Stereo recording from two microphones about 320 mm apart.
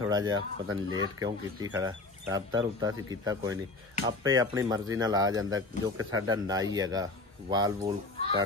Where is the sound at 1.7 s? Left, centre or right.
Centre.